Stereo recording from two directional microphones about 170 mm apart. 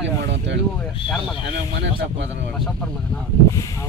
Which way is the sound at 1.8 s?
90° right.